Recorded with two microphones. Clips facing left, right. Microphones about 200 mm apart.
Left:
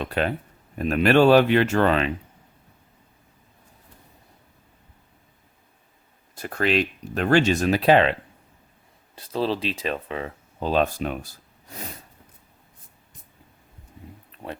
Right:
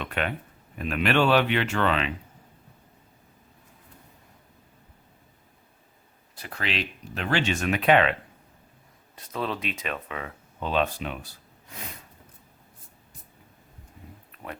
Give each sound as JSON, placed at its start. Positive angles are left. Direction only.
{"t": 0.0, "sound": "speech", "side_deg": 35}
{"t": 6.3, "sound": "speech", "side_deg": 45}
{"t": 9.1, "sound": "speech", "side_deg": 30}
{"t": 14.3, "sound": "a sound", "side_deg": 30}